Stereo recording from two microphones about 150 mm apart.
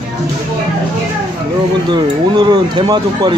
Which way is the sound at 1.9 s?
30° right (ahead or behind).